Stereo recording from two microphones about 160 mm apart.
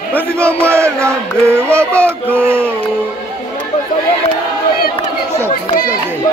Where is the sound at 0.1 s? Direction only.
10° left (ahead or behind).